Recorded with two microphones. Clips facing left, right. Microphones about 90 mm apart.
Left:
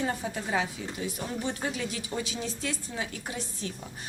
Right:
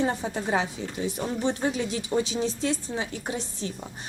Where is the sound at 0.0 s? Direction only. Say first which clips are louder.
Right 4 dB; 30° right (ahead or behind).